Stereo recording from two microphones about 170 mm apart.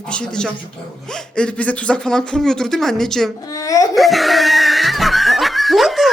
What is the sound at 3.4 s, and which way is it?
Speech, 20° left (ahead or behind).